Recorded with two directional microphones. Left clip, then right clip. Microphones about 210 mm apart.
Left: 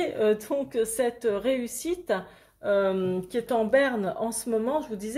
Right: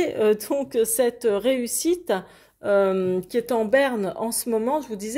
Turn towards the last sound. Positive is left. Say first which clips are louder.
# right 3 dB
turn(degrees=-30)  # may be behind; listen again after turning